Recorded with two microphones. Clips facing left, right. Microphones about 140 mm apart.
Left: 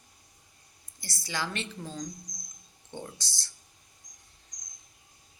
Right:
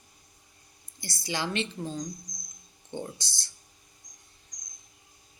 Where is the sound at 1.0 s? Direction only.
20° right (ahead or behind).